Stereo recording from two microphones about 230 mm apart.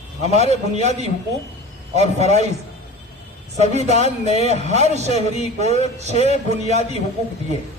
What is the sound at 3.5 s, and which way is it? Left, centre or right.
A man's voice, right.